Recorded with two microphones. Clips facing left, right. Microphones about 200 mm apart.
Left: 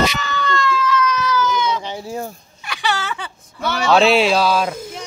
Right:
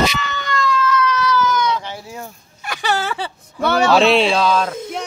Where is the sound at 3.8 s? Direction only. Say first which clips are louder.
Left 1 dB; centre (ahead or behind).